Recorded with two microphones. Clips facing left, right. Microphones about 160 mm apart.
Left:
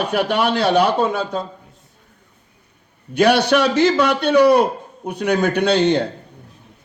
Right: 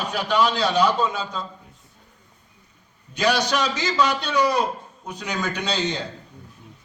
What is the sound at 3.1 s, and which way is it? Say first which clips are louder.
A man's voice: left 8 dB; 60° left (ahead or behind).